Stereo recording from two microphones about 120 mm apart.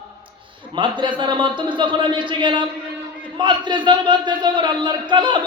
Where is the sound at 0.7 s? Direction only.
40° right (ahead or behind).